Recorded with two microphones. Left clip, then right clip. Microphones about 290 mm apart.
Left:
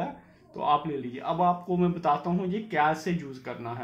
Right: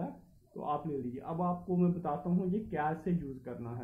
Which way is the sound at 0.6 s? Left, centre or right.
Left.